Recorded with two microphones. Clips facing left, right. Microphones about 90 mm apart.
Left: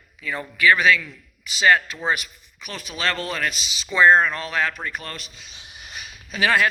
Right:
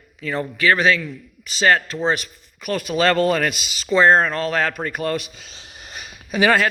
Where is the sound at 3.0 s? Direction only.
50° right (ahead or behind).